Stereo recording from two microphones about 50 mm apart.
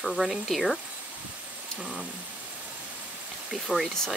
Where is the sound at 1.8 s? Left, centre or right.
Centre.